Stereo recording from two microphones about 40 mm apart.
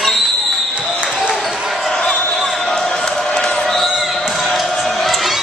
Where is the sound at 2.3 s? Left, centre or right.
Centre.